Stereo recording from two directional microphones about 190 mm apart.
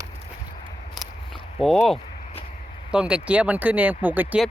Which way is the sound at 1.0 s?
Centre (ahead or behind).